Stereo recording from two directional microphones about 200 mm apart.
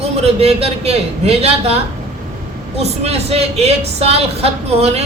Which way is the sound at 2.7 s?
30° right (ahead or behind).